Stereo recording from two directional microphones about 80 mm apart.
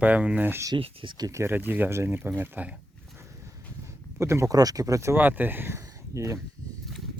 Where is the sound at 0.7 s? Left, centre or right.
Right.